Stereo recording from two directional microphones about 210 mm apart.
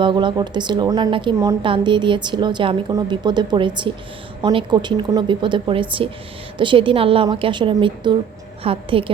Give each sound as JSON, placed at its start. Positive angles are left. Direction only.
{"t": 0.0, "sound": "a woman's voice", "side_deg": -20}